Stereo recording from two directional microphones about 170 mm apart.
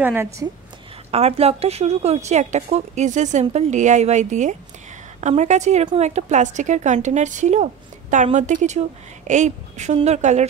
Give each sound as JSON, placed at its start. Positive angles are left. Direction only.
{"t": 0.0, "sound": "a woman's voice", "side_deg": -15}
{"t": 1.1, "sound": "a woman's voice", "side_deg": -35}